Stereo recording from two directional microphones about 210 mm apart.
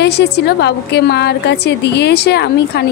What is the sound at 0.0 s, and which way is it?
A woman's voice, 50° left (ahead or behind).